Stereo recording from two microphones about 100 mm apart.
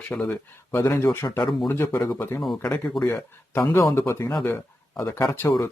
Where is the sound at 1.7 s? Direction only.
25° left (ahead or behind).